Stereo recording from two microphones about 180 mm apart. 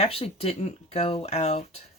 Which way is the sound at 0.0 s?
35° left (ahead or behind).